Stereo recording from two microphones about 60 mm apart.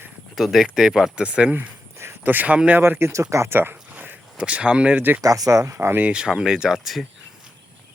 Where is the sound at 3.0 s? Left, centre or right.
Right.